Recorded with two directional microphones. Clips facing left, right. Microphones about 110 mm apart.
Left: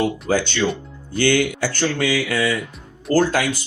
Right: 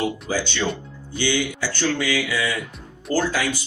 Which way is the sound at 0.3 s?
60° left (ahead or behind).